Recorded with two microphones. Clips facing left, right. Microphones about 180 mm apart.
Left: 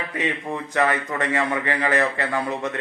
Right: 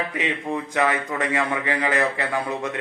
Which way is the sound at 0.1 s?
15° right (ahead or behind).